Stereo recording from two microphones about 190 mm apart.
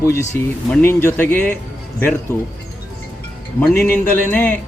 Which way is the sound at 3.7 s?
10° left (ahead or behind).